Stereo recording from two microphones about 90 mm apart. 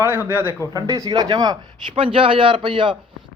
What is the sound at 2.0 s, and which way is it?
Speech, 80° right.